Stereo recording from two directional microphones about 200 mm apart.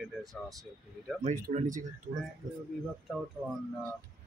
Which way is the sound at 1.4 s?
40° right (ahead or behind).